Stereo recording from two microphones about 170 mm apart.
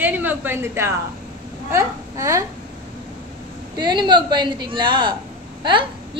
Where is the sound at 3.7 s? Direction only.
25° right (ahead or behind).